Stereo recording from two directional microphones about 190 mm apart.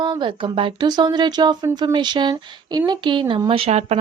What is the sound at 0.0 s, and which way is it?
Speech, 25° right (ahead or behind).